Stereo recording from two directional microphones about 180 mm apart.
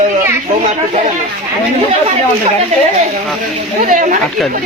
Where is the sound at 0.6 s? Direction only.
40° right (ahead or behind).